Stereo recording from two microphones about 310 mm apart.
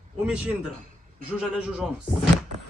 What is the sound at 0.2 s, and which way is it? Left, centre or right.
A man's voice, centre.